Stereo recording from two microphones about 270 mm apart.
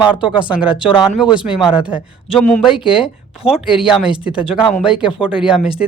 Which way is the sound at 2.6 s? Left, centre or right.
Centre.